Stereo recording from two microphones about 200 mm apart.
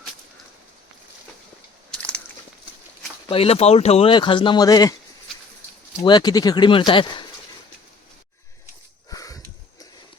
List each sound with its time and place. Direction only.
1.9 s a sound: 5° left (ahead or behind)
3.2 s speech: 30° left (ahead or behind)
6.0 s speech: 20° left (ahead or behind)
9.0 s sniff: 15° left (ahead or behind)